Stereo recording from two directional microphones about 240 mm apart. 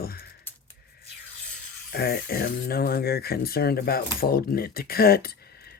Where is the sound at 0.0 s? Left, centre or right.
Left.